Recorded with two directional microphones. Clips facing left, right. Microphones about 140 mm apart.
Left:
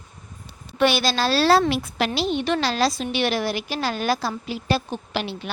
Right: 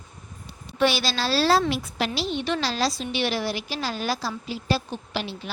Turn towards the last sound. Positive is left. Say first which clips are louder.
# left 3 dB
turn(degrees=65)  # may be behind; listen again after turning